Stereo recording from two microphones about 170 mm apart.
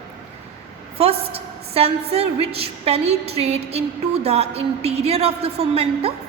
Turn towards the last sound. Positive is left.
turn(degrees=-35)  # may be behind; listen again after turning